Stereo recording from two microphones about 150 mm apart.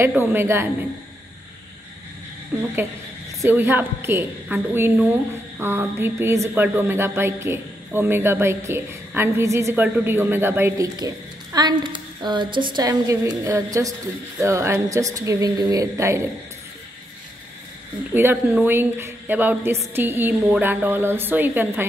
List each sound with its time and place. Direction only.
0.0 s a woman's voice: 15° right (ahead or behind)
2.5 s a woman's voice: 10° right (ahead or behind)
11.0 s a woman's voice: 25° right (ahead or behind)
18.1 s a woman's voice: 15° right (ahead or behind)